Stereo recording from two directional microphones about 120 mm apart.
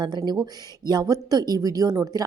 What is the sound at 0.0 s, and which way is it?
Speech, 35° right (ahead or behind).